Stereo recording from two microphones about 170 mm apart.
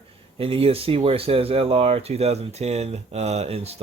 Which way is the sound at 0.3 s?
35° right (ahead or behind).